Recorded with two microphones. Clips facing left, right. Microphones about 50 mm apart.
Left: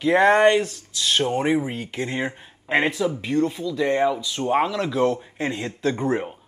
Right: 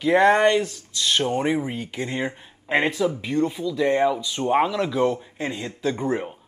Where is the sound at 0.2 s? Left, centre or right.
Left.